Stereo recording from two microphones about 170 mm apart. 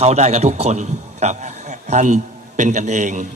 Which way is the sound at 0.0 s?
40° right (ahead or behind).